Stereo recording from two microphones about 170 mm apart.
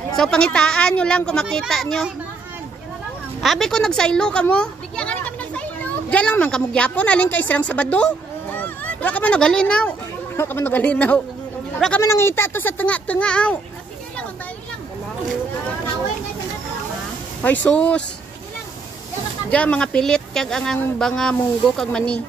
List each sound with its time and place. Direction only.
0.1 s speech: 5° left (ahead or behind)
3.3 s speech: centre (ahead or behind)
17.6 s speech: 10° left (ahead or behind)
19.5 s speech: 5° left (ahead or behind)